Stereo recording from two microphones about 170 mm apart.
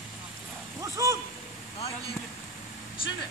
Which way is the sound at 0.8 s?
20° right (ahead or behind).